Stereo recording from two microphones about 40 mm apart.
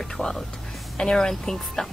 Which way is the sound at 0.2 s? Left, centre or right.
Centre.